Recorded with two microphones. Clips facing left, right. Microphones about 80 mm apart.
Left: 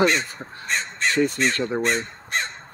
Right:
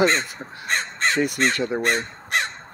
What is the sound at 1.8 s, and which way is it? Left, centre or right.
Crow, right.